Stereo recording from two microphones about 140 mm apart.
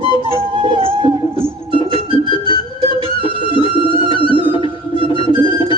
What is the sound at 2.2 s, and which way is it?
Music, 35° left (ahead or behind).